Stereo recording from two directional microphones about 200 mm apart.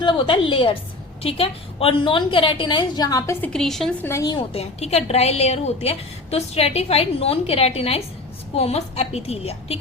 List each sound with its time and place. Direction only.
0.0 s a woman's voice: 25° left (ahead or behind)
3.5 s a woman's voice: centre (ahead or behind); by 9.7 s 30° left (ahead or behind)